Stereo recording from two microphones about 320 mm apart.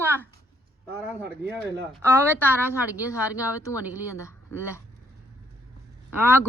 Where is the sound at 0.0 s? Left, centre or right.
Centre.